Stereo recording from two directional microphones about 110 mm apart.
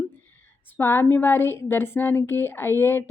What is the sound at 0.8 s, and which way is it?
A woman's voice, 20° left (ahead or behind).